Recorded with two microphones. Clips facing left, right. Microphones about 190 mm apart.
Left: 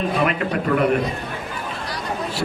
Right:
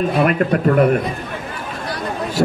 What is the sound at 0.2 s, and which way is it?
Speech, 50° right (ahead or behind).